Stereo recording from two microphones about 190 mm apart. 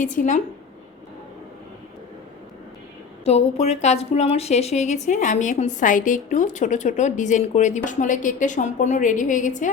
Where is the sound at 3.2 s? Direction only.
35° left (ahead or behind).